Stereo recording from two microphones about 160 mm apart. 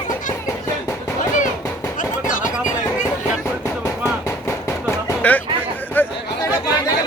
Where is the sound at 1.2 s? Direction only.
55° left (ahead or behind).